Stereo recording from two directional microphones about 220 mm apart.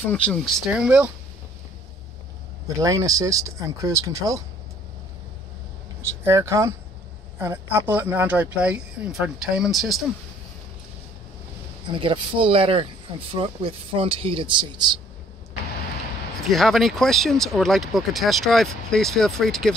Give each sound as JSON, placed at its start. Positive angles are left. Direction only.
{"t": 0.0, "sound": "speech", "side_deg": 5}
{"t": 2.8, "sound": "speech", "side_deg": -15}
{"t": 6.2, "sound": "speech", "side_deg": -10}
{"t": 12.0, "sound": "speech", "side_deg": -25}
{"t": 16.3, "sound": "speech", "side_deg": 0}